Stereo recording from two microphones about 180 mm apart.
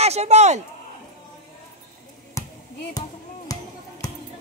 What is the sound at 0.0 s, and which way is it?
Speech, 35° right (ahead or behind).